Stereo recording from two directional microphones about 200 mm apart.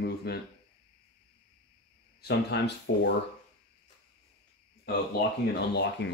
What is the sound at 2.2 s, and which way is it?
Speech, 55° left (ahead or behind).